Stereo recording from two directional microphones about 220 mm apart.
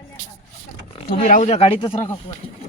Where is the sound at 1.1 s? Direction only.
40° left (ahead or behind); by 1.9 s 25° left (ahead or behind).